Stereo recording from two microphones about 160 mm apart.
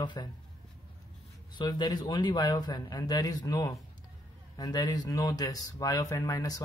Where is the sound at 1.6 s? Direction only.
25° left (ahead or behind).